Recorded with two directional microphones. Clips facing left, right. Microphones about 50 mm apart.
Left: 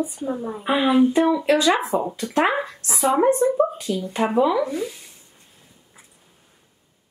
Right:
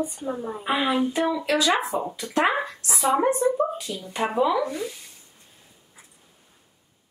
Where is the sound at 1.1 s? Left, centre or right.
Left.